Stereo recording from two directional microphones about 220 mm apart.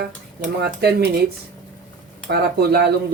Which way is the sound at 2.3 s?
50° right (ahead or behind).